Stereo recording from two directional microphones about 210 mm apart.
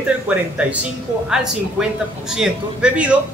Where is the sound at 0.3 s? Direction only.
5° right (ahead or behind).